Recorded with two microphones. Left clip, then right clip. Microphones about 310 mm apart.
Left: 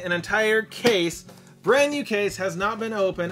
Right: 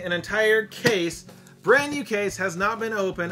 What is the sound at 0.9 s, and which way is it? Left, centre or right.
Speech, left.